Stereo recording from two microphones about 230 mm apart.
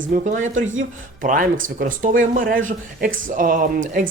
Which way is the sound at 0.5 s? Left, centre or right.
Right.